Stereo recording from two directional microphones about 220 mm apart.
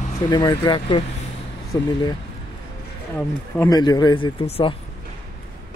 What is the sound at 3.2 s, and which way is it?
Speech, 15° left (ahead or behind).